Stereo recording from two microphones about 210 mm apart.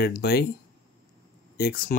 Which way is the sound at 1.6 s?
45° left (ahead or behind).